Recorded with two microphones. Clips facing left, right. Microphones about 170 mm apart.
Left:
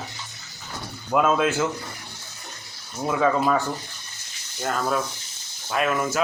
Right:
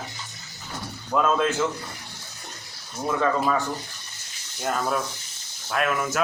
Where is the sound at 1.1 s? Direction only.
5° left (ahead or behind).